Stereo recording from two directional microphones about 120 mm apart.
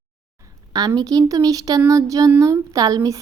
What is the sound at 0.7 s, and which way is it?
A woman's voice, 35° right (ahead or behind).